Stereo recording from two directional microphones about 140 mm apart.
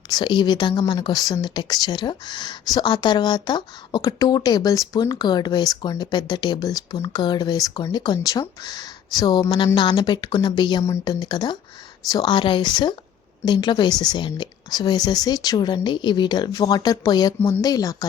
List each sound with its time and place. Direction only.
0.1 s speech: 30° left (ahead or behind)